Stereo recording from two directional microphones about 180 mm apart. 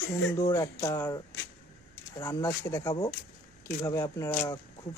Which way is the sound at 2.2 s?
20° left (ahead or behind).